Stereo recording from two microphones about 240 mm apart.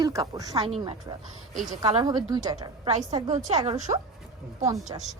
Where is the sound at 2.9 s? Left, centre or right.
Right.